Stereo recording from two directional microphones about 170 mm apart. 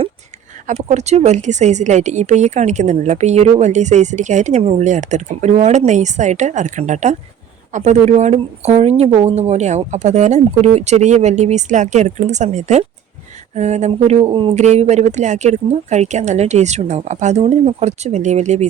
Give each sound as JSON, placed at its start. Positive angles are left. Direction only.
{"t": 0.7, "sound": "speech", "side_deg": -40}